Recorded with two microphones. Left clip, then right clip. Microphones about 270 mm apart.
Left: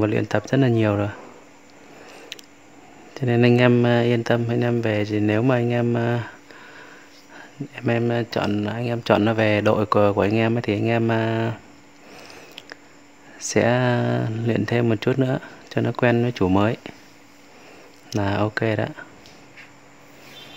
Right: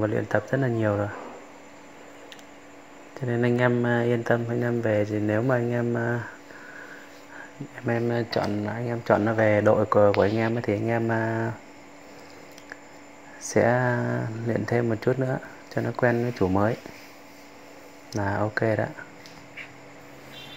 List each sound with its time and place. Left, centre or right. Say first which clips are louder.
0.0 s speech: left 3 dB; left
3.2 s speech: left 6 dB; left
7.7 s speech: left 4 dB; left
13.4 s speech: left 2 dB; left
18.1 s speech: left 3 dB; left